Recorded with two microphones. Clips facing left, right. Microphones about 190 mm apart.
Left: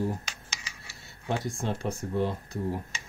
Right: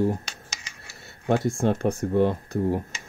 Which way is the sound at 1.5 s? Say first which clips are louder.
Right 9 dB; 60° right (ahead or behind).